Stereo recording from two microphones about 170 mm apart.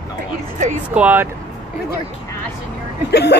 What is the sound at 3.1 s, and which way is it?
Speech, 75° left (ahead or behind).